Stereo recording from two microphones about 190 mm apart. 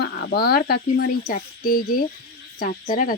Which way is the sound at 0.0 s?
55° left (ahead or behind).